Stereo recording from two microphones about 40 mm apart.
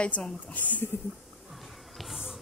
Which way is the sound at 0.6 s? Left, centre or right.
Left.